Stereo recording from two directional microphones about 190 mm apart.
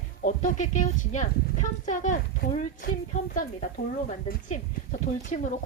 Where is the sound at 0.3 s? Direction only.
40° left (ahead or behind).